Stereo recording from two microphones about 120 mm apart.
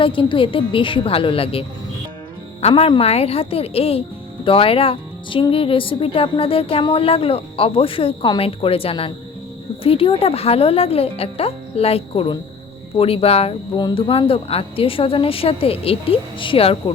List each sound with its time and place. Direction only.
0.0 s a woman's voice: 45° left (ahead or behind)